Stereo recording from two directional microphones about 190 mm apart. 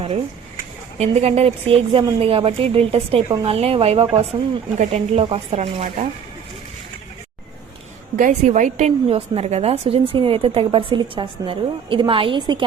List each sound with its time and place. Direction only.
0.9 s a woman's voice: 35° right (ahead or behind)
8.1 s a woman's voice: 40° right (ahead or behind); by 12.6 s 25° right (ahead or behind)